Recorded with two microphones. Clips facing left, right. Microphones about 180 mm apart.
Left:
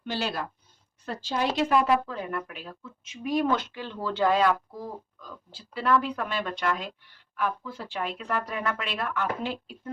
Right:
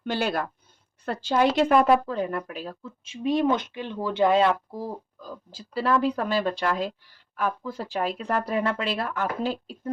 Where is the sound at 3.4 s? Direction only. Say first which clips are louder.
Right 3 dB; 20° right (ahead or behind).